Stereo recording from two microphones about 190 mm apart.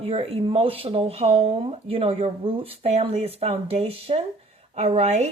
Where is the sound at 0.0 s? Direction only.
30° right (ahead or behind).